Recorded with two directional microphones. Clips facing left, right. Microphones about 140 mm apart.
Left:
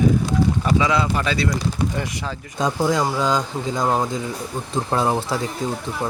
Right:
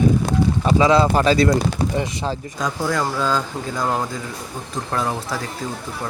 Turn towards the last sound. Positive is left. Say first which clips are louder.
# left 3 dB
turn(degrees=25)  # may be behind; listen again after turning